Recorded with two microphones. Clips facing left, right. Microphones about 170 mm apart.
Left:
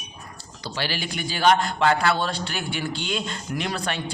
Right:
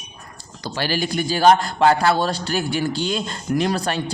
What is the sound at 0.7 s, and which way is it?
Speech, 45° right (ahead or behind).